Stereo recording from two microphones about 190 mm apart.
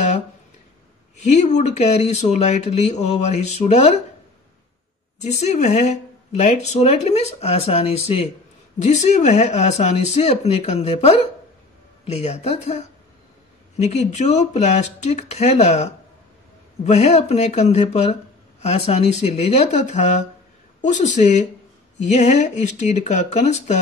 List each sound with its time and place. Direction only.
1.2 s speech: 35° left (ahead or behind)
5.2 s speech: 35° left (ahead or behind)